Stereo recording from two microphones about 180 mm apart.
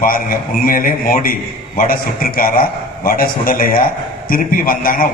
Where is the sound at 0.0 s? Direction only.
50° left (ahead or behind).